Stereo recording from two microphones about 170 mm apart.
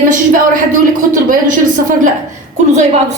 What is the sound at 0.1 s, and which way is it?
Speech, 50° right (ahead or behind).